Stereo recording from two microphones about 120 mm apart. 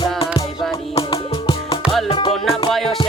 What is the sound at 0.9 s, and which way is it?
Music, 50° left (ahead or behind).